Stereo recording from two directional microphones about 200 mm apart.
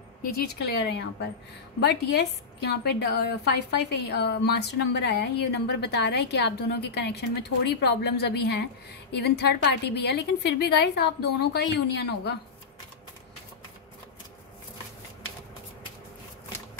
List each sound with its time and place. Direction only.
0.7 s a woman's voice: 55° left (ahead or behind)